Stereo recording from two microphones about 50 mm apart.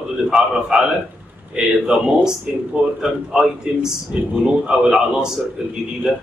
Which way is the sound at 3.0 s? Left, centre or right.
Centre.